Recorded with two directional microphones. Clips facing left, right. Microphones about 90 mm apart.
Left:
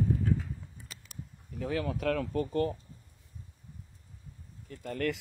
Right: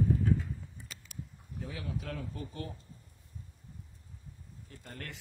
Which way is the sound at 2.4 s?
50° left (ahead or behind).